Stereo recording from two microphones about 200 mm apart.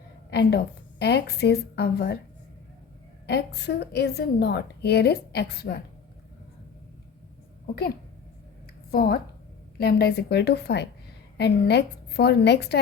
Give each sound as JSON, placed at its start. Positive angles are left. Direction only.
{"t": 0.3, "sound": "a woman's voice", "side_deg": 55}
{"t": 3.2, "sound": "a woman's voice", "side_deg": 55}
{"t": 8.9, "sound": "a woman's voice", "side_deg": 50}